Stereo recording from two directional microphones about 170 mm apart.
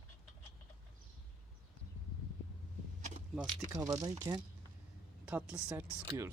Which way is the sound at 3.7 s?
20° right (ahead or behind).